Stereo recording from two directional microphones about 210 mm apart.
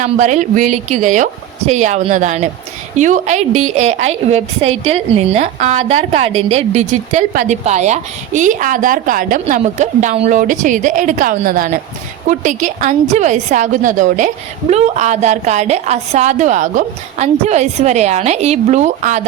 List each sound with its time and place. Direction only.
0.0 s a woman's voice: 35° right (ahead or behind)